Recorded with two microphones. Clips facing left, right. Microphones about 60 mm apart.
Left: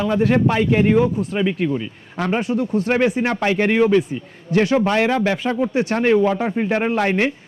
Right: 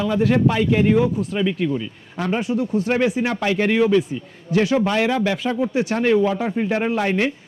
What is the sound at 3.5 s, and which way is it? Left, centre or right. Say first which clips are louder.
Speech: left 1 dB; left.